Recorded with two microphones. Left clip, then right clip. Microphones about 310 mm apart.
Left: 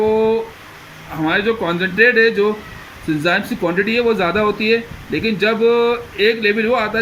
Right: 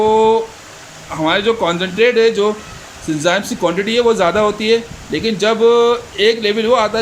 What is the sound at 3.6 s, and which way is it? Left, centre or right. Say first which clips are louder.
Speech: right 3 dB; right.